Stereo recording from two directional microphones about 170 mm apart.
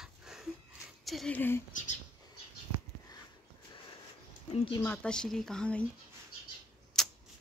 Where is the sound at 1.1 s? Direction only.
5° left (ahead or behind).